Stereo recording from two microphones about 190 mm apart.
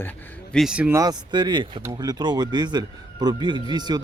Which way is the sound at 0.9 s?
20° right (ahead or behind).